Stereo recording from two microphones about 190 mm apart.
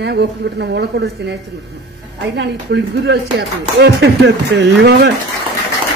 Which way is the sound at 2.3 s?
60° right (ahead or behind).